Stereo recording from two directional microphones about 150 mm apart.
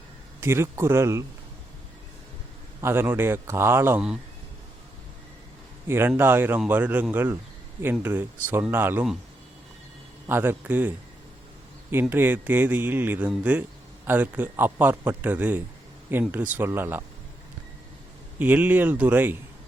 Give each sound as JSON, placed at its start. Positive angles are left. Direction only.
{"t": 0.3, "sound": "speech", "side_deg": -15}
{"t": 2.8, "sound": "speech", "side_deg": -15}
{"t": 5.9, "sound": "speech", "side_deg": -15}
{"t": 10.2, "sound": "speech", "side_deg": -15}
{"t": 18.3, "sound": "speech", "side_deg": -10}